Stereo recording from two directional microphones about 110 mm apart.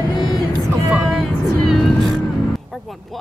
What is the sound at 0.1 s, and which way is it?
Vehicle, 45° left (ahead or behind).